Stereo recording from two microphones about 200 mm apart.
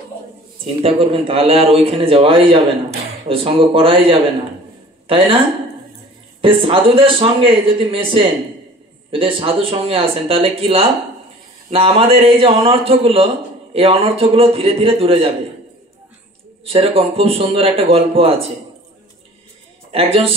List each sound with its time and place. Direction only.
0.8 s speech: 25° right (ahead or behind)
6.4 s speech: 25° right (ahead or behind)
9.1 s speech: 25° right (ahead or behind)
16.6 s speech: 30° right (ahead or behind)
19.9 s speech: 30° right (ahead or behind)